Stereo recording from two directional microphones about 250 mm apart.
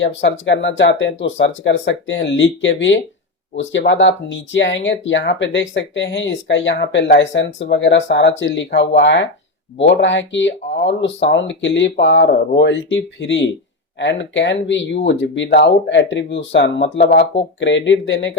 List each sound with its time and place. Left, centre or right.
0.0 s speech: left